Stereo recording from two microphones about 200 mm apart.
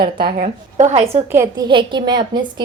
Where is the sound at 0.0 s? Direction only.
50° right (ahead or behind); by 1.2 s 30° right (ahead or behind).